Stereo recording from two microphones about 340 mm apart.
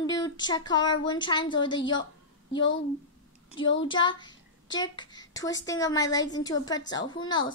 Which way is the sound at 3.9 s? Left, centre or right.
Centre.